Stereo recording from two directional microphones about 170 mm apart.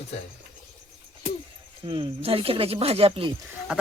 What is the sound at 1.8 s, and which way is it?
Speech, 30° right (ahead or behind).